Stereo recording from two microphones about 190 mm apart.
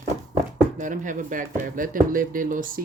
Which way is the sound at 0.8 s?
40° right (ahead or behind).